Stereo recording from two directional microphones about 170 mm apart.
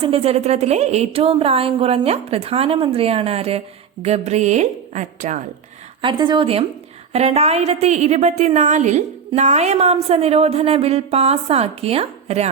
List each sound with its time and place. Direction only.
0.0 s a woman's voice: 35° right (ahead or behind)
6.0 s a woman's voice: 25° right (ahead or behind)